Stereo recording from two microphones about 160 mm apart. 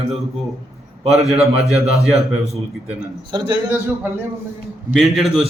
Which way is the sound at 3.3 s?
30° right (ahead or behind).